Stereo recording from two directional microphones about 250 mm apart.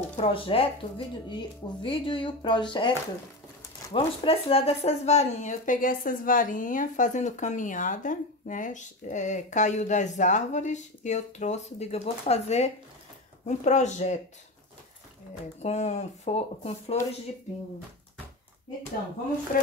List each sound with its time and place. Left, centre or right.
0.2 s speech: left
3.9 s speech: left
15.6 s speech: left